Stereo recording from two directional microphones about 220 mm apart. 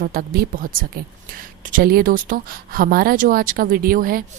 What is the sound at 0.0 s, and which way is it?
A woman's voice, 40° right (ahead or behind).